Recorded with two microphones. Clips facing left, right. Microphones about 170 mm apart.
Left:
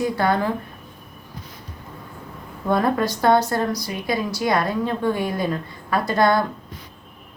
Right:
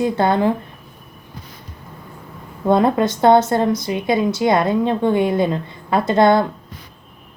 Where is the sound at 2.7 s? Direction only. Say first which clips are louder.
Right 5 dB; 25° right (ahead or behind).